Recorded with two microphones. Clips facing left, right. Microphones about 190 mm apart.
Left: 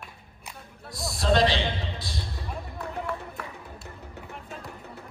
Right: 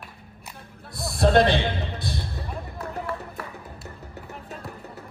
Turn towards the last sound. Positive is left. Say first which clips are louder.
# right 2 dB
turn(degrees=0)  # may be behind; listen again after turning